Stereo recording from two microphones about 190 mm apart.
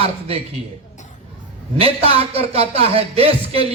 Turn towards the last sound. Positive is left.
turn(degrees=-30)  # may be behind; listen again after turning